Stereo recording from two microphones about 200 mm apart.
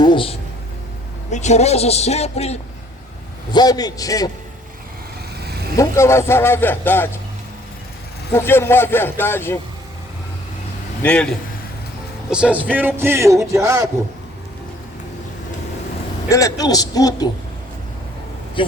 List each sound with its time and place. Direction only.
0.0 s a sound: 25° left (ahead or behind)
1.3 s a man's voice: 35° left (ahead or behind)
3.5 s a man's voice: 20° left (ahead or behind)
5.7 s speech: 15° left (ahead or behind)
8.3 s speech: 10° left (ahead or behind)
11.0 s a man's voice: 5° left (ahead or behind)
12.3 s speech: 5° right (ahead or behind)
16.3 s a man's voice: 15° left (ahead or behind)